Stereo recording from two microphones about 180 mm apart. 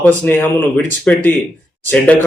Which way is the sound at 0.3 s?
10° left (ahead or behind).